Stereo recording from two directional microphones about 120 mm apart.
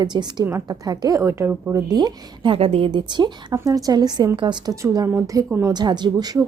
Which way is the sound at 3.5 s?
30° right (ahead or behind).